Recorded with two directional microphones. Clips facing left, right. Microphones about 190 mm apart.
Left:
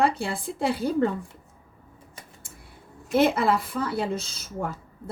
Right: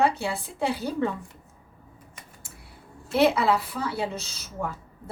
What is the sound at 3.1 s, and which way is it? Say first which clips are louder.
Speech: even; 50° left (ahead or behind).